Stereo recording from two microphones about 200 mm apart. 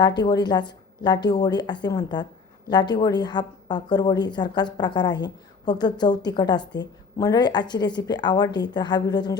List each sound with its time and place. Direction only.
0.2 s a woman's voice: 20° left (ahead or behind)